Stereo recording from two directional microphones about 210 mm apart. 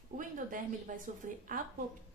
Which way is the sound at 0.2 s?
40° right (ahead or behind).